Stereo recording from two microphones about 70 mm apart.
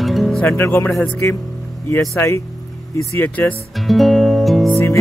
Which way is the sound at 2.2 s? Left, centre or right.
Left.